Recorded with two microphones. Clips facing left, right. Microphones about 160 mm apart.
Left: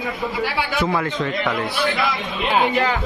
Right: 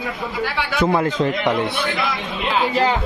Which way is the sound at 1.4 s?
20° right (ahead or behind).